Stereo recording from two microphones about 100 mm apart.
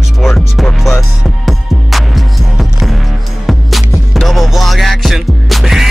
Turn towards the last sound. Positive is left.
turn(degrees=0)  # may be behind; listen again after turning